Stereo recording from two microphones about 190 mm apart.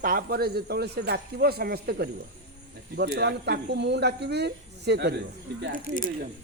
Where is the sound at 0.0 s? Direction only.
45° right (ahead or behind).